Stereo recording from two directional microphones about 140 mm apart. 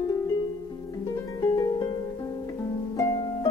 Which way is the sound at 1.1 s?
30° left (ahead or behind).